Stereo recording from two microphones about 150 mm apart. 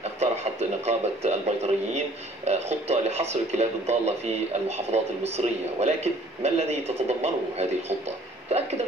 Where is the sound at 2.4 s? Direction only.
45° right (ahead or behind).